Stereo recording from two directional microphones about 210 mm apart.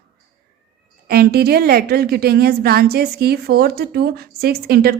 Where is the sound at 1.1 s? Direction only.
45° right (ahead or behind).